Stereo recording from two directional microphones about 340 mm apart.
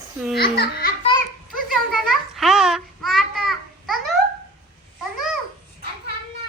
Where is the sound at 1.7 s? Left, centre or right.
Centre.